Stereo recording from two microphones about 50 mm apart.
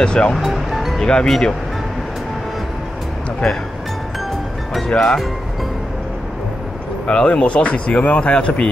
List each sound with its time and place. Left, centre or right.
0.0 s speech: centre
0.4 s music: centre
1.2 s speech: centre
4.8 s speech: centre
7.1 s speech: centre